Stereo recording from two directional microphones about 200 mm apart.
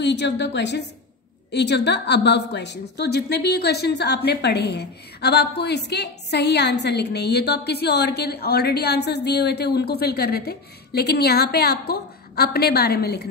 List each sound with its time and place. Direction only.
0.0 s a woman's voice: 60° left (ahead or behind)